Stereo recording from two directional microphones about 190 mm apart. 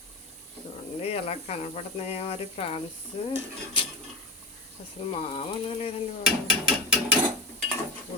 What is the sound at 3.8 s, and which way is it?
Dishes, 25° left (ahead or behind).